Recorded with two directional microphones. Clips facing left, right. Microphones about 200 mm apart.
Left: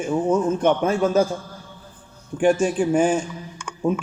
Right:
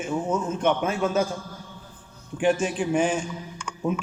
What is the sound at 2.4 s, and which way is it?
Speech, 45° left (ahead or behind).